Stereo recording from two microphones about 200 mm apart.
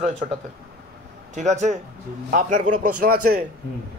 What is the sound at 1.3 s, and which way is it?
A man's voice, 35° right (ahead or behind).